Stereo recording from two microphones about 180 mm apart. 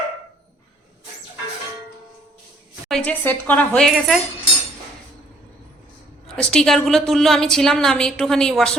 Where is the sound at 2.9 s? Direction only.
10° left (ahead or behind).